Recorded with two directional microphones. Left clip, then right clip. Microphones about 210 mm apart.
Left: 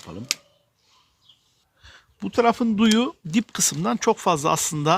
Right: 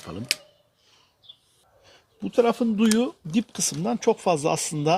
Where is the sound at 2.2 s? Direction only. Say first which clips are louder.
Left 1 dB; 50° left (ahead or behind).